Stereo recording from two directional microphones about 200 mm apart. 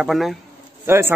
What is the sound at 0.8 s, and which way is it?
Speech, 10° right (ahead or behind).